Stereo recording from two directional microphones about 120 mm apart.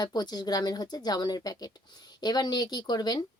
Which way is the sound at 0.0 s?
35° left (ahead or behind).